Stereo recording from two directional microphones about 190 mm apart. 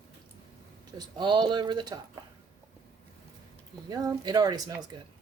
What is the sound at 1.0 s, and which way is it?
Speech, 25° right (ahead or behind).